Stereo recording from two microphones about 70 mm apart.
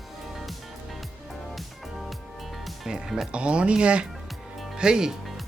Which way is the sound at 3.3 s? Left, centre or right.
Centre.